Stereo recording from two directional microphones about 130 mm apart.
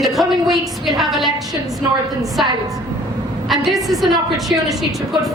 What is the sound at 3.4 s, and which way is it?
A woman's voice, centre (ahead or behind).